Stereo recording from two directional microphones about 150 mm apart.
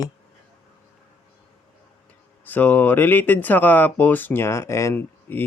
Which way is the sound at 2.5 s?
10° left (ahead or behind).